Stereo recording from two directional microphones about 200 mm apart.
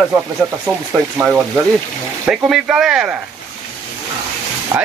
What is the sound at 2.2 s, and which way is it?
Speech, 5° right (ahead or behind).